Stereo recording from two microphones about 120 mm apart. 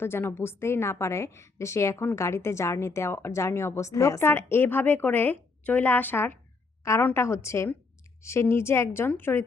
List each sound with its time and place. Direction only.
0.0 s a woman's voice: 20° left (ahead or behind)